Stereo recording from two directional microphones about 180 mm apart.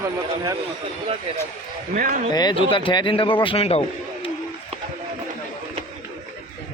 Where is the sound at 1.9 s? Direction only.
45° right (ahead or behind).